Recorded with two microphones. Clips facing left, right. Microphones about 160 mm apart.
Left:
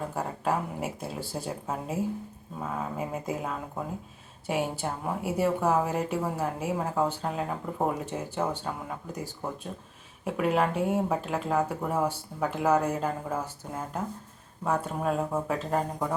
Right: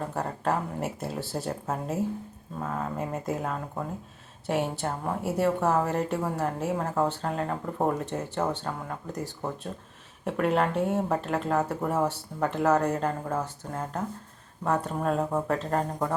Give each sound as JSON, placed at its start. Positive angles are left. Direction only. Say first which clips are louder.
{"t": 0.1, "sound": "speech", "louder": "right 1 dB", "side_deg": 5}